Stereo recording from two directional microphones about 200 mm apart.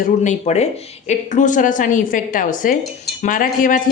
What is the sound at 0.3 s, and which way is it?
Speech, 35° left (ahead or behind).